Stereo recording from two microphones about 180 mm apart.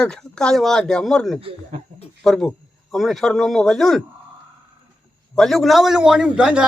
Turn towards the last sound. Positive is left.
turn(degrees=-5)  # may be behind; listen again after turning